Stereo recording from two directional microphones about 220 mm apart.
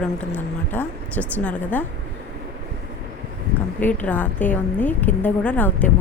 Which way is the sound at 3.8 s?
5° left (ahead or behind).